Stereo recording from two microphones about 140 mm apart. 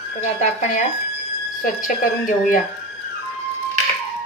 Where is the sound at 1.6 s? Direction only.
70° left (ahead or behind).